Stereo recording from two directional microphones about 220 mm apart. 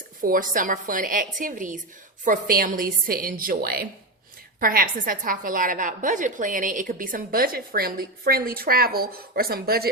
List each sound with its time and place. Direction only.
0.2 s a woman's voice: 40° right (ahead or behind)